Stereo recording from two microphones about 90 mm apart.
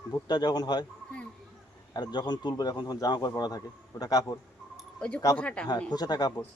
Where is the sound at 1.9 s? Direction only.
55° left (ahead or behind).